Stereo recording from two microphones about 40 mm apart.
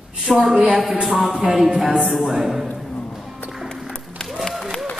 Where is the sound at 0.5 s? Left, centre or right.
Centre.